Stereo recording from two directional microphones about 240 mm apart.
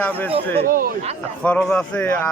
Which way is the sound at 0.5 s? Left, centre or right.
Right.